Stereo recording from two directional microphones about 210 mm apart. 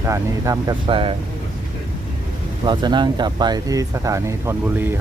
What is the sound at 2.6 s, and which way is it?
Speech, 20° right (ahead or behind).